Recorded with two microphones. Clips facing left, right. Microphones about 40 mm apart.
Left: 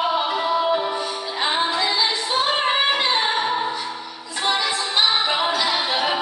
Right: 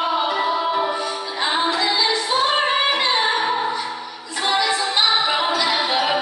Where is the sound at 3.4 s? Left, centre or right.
Centre.